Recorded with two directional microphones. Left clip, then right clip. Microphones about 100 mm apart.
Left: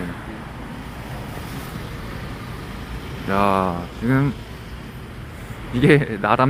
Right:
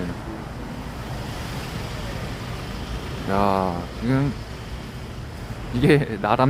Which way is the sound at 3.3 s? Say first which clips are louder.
Left 2 dB; centre (ahead or behind).